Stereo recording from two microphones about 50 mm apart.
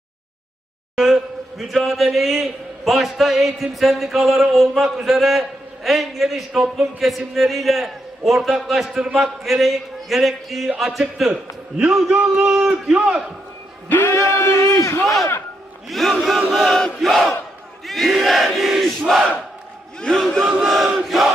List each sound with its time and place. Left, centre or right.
0.9 s a man's voice: centre
13.9 s a man's voice: left
15.0 s a man's voice: centre
17.8 s crowd: centre
20.0 s battle cry: centre
20.6 s a man's voice: centre